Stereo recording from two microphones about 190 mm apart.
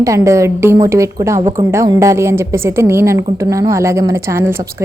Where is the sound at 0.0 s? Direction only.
15° right (ahead or behind).